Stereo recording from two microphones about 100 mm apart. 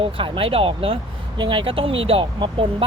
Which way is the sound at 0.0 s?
65° right (ahead or behind).